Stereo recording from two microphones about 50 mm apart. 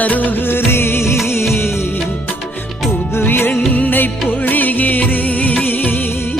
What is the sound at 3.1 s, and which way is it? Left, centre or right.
Music, left.